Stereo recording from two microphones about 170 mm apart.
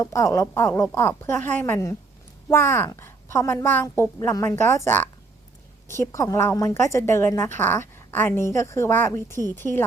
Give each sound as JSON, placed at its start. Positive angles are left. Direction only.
{"t": 0.0, "sound": "a woman's voice", "side_deg": 15}